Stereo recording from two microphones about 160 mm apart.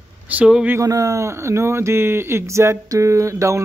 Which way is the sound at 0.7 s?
20° right (ahead or behind).